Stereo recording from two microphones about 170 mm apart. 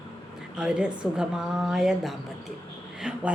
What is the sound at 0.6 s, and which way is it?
A woman's voice, 5° right (ahead or behind).